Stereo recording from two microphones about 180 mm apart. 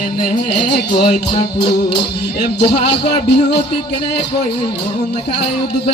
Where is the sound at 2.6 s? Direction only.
70° left (ahead or behind).